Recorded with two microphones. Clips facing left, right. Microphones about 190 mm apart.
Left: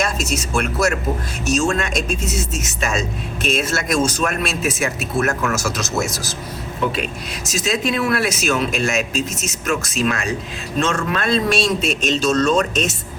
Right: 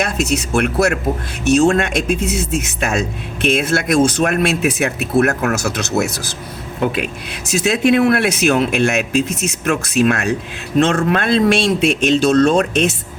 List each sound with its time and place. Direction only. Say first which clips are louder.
0.0 s a man's voice: right 4 dB; 60° right (ahead or behind)
7.4 s a man's voice: right 6 dB; 60° right (ahead or behind)